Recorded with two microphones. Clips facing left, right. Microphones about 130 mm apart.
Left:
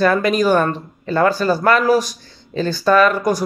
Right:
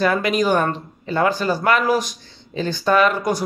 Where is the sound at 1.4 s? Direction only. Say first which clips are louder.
Left 3 dB; 40° left (ahead or behind).